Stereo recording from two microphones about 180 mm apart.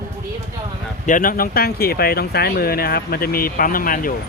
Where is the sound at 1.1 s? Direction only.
50° left (ahead or behind).